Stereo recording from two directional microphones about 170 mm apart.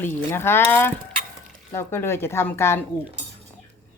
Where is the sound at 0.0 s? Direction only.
10° left (ahead or behind).